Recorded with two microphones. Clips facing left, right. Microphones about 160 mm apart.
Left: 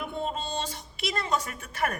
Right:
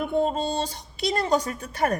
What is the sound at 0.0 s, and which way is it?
A woman's voice, 40° right (ahead or behind).